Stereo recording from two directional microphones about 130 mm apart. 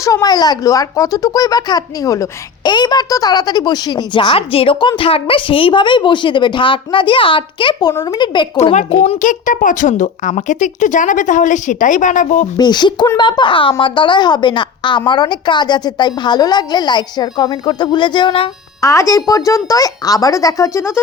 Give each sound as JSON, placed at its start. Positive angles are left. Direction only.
{"t": 0.0, "sound": "speech", "side_deg": 25}
{"t": 9.2, "sound": "a woman's voice", "side_deg": 85}
{"t": 12.5, "sound": "speech", "side_deg": 35}
{"t": 18.8, "sound": "speech", "side_deg": 25}